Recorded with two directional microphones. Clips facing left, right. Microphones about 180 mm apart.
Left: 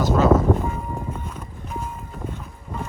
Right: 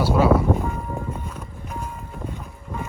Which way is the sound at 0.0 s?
10° right (ahead or behind).